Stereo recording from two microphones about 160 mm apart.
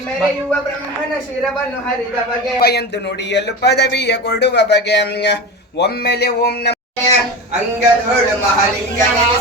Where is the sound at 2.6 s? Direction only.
85° left.